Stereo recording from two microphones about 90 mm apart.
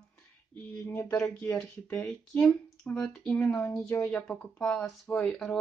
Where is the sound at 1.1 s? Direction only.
5° left (ahead or behind).